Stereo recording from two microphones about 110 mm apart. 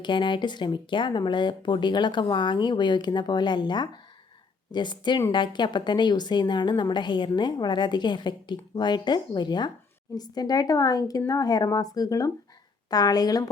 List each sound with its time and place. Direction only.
0.0 s a woman's voice: 45° left (ahead or behind)